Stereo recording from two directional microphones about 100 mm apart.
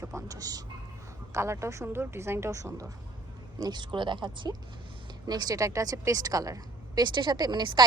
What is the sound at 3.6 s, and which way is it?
A woman's voice, 45° right (ahead or behind).